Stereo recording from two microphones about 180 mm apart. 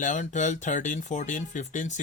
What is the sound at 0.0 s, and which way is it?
Speech, 45° left (ahead or behind).